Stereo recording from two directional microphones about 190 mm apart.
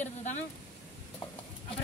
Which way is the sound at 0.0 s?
40° left (ahead or behind).